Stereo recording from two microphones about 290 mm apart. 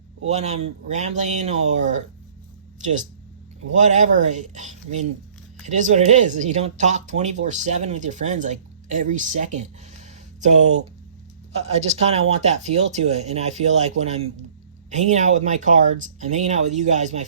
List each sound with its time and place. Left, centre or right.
0.3 s speech: right
3.7 s speech: right
14.8 s speech: right